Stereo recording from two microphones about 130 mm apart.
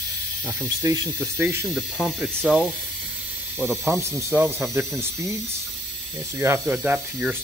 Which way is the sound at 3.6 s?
20° right (ahead or behind).